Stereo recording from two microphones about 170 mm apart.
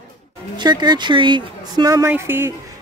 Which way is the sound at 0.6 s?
25° right (ahead or behind).